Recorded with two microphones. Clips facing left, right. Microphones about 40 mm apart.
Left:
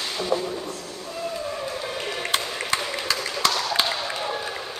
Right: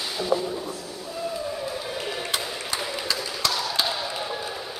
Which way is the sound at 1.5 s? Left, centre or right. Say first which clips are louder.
Left 1 dB; centre.